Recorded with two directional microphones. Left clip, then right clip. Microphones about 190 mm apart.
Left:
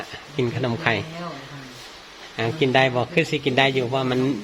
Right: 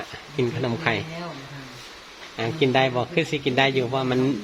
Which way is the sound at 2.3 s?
10° left (ahead or behind).